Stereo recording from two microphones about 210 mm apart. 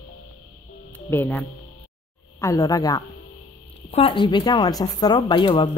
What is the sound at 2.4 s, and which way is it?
Speech, 15° left (ahead or behind).